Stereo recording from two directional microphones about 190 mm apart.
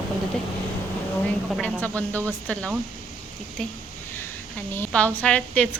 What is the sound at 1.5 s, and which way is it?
A woman's voice, 5° left (ahead or behind).